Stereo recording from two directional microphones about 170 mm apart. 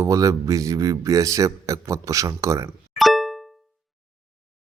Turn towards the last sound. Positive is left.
turn(degrees=0)  # may be behind; listen again after turning